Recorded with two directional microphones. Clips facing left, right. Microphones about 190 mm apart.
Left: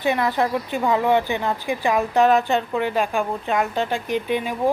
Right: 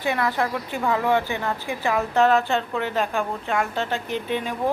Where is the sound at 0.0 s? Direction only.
20° left (ahead or behind).